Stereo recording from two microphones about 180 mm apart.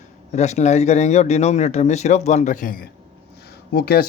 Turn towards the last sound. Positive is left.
turn(degrees=60)  # may be behind; listen again after turning